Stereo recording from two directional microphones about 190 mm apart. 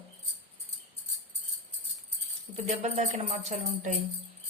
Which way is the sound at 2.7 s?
35° right (ahead or behind).